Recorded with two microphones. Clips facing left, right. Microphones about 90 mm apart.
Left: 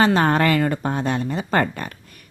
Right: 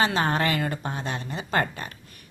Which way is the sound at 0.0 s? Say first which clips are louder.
Left 6 dB; 40° left (ahead or behind).